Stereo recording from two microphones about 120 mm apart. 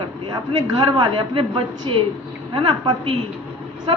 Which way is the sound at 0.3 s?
35° right (ahead or behind).